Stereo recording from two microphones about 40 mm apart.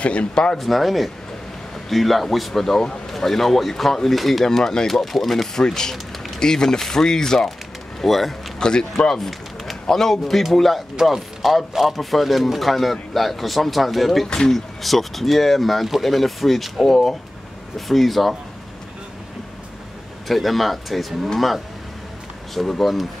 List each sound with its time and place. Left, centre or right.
0.0 s speech: left
0.3 s speech: centre
0.6 s speech: centre
4.5 s speech: centre
5.5 s speech: centre
8.0 s speech: centre
8.5 s speech: centre
9.1 s a man's voice: centre
14.2 s speech: centre
14.5 s speech: centre
20.2 s speech: centre
22.5 s speech: centre